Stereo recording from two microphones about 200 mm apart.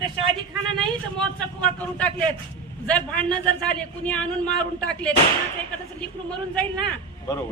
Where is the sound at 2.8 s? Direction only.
5° left (ahead or behind).